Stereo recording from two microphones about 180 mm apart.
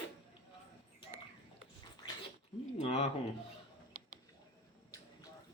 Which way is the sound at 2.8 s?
40° left (ahead or behind).